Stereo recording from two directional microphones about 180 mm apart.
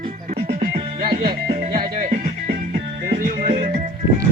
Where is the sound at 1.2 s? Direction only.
60° right (ahead or behind).